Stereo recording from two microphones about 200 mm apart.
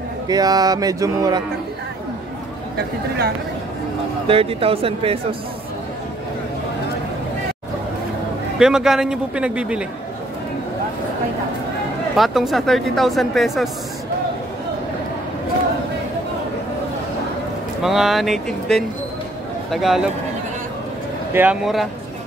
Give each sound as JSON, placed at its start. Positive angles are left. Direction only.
{"t": 0.3, "sound": "speech", "side_deg": -20}
{"t": 4.3, "sound": "speech", "side_deg": -30}
{"t": 8.5, "sound": "speech", "side_deg": -5}
{"t": 12.2, "sound": "speech", "side_deg": 0}
{"t": 17.8, "sound": "speech", "side_deg": 0}
{"t": 21.3, "sound": "speech", "side_deg": -10}